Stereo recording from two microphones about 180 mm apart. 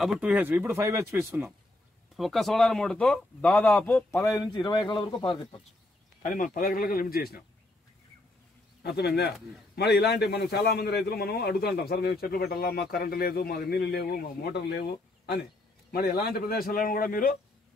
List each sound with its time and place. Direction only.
0.0 s speech: 5° right (ahead or behind)
2.1 s speech: centre (ahead or behind)
4.3 s speech: 25° left (ahead or behind)
6.2 s speech: 50° left (ahead or behind)
8.9 s a man's voice: 65° left (ahead or behind)
15.9 s a man's voice: 60° left (ahead or behind)